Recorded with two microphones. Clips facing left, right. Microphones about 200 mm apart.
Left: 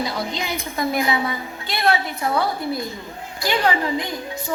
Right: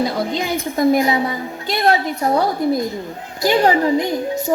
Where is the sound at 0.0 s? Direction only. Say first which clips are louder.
Right 6 dB; 50° right (ahead or behind).